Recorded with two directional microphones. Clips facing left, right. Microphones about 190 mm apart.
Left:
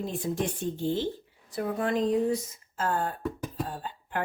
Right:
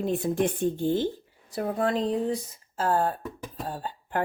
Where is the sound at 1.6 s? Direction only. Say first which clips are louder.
Right 1 dB; 35° right (ahead or behind).